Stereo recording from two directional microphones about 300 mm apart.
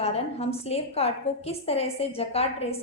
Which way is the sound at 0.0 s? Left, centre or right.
Centre.